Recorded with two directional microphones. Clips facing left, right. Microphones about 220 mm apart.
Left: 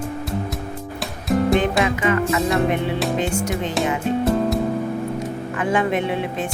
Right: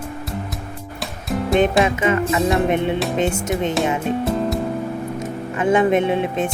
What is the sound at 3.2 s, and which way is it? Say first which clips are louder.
Speech: right 2 dB; 25° right (ahead or behind).